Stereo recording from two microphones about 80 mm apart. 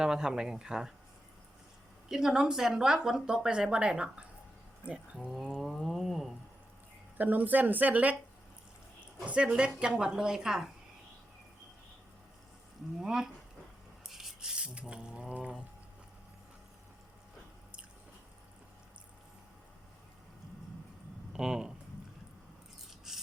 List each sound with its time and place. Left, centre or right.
0.0 s speech: centre
2.0 s speech: centre
5.1 s a sound: centre
7.2 s a woman's voice: right
9.2 s speech: centre
13.0 s speech: centre
14.0 s a sound: centre
21.3 s speech: centre
23.1 s rub: centre